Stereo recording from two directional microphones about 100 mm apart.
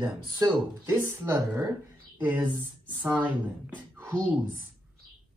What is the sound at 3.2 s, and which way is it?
Speech, 15° right (ahead or behind).